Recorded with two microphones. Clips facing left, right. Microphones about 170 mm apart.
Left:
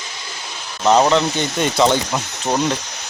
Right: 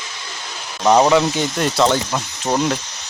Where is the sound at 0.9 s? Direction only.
10° right (ahead or behind).